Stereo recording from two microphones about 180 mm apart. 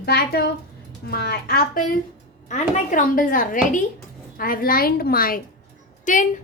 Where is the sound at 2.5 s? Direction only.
40° left (ahead or behind).